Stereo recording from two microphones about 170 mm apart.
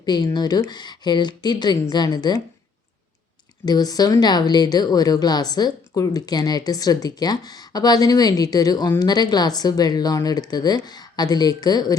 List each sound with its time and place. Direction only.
0.0 s speech: 25° left (ahead or behind)
3.7 s speech: 20° left (ahead or behind)